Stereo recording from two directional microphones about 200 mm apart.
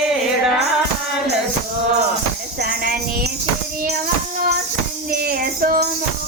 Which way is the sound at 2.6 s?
45° right (ahead or behind).